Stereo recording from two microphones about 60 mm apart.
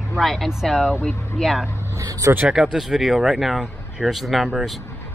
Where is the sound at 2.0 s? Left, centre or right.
Right.